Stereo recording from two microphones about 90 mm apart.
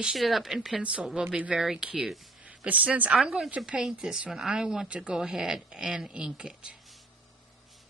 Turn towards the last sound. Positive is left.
turn(degrees=-10)  # may be behind; listen again after turning